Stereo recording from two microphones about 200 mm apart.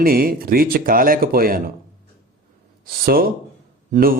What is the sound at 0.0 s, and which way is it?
Speech, 45° right (ahead or behind).